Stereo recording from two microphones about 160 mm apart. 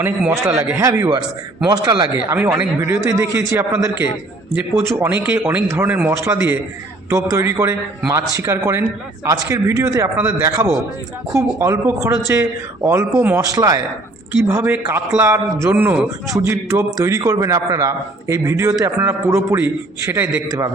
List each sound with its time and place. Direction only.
0.0 s a man's voice: 5° right (ahead or behind); by 2.0 s 25° right (ahead or behind)
2.1 s a man's voice: 10° right (ahead or behind)